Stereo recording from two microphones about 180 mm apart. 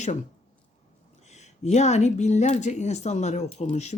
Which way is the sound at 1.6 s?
40° left (ahead or behind).